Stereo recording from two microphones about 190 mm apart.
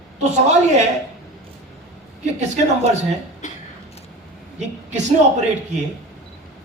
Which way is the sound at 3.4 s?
40° left (ahead or behind).